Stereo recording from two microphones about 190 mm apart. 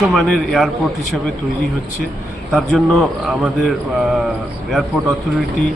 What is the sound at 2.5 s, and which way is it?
A man's voice, centre (ahead or behind).